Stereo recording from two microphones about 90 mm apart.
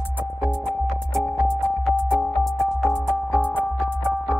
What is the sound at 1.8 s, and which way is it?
Music, 5° left (ahead or behind).